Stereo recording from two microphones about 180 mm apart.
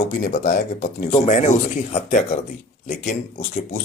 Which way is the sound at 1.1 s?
40° left (ahead or behind).